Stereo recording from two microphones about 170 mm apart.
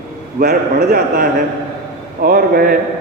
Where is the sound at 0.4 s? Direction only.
55° right (ahead or behind).